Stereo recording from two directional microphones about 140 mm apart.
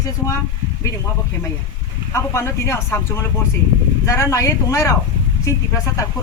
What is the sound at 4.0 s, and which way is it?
Speech, 20° left (ahead or behind).